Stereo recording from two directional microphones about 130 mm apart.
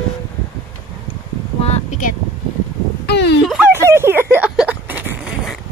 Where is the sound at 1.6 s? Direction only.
55° left (ahead or behind).